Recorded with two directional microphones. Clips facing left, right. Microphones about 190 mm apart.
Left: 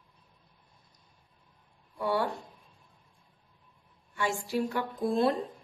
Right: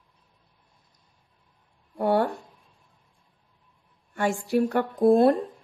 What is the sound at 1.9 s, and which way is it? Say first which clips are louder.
Speech: right 7 dB; 50° right (ahead or behind).